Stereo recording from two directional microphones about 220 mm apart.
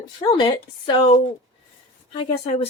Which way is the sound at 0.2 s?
20° left (ahead or behind).